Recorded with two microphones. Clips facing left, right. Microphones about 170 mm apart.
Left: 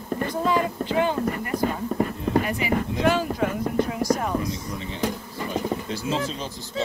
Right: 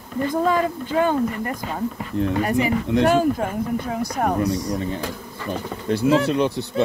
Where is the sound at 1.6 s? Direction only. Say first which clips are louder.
Left 3 dB; 50° left (ahead or behind).